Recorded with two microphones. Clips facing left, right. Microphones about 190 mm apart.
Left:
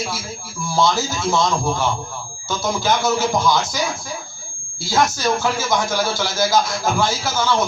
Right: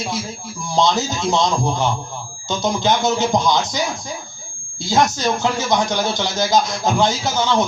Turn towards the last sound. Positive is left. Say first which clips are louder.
# right 1 dB
turn(degrees=-20)  # may be behind; listen again after turning